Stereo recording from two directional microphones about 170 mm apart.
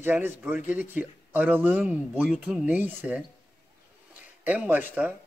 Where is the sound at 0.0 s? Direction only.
10° right (ahead or behind).